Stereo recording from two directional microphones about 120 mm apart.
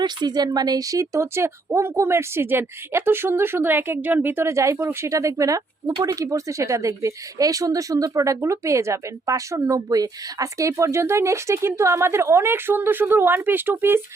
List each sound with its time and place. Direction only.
0.0 s speech: 35° right (ahead or behind); by 14.0 s 20° right (ahead or behind)